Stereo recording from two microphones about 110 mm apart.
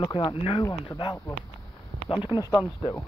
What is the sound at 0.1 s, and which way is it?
Speech, 45° left (ahead or behind).